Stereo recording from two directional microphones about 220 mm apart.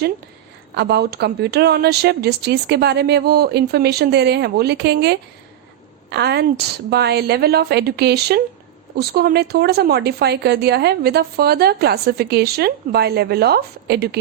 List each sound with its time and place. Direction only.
0.8 s speech: 50° right (ahead or behind)